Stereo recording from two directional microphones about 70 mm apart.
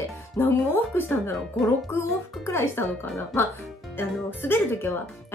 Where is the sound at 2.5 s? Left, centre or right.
Left.